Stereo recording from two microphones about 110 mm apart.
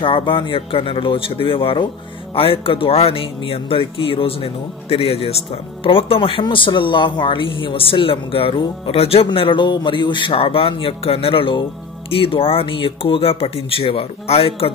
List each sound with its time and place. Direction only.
0.0 s speech: 50° left (ahead or behind)